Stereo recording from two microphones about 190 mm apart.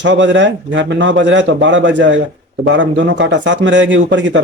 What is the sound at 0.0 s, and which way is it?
A man's voice, 70° right (ahead or behind).